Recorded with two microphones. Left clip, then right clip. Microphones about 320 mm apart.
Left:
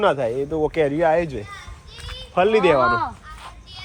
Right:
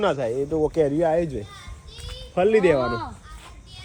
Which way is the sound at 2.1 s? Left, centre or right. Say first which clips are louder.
Left 2 dB; centre.